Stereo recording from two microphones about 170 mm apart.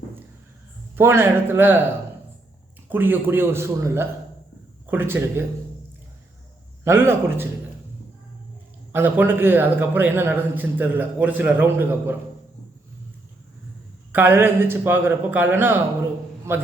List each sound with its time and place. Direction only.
0.9 s a man's voice: 15° right (ahead or behind)
2.9 s a man's voice: 10° right (ahead or behind)
6.8 s a man's voice: 15° right (ahead or behind)
8.9 s a man's voice: 10° right (ahead or behind)
14.1 s a man's voice: 10° right (ahead or behind)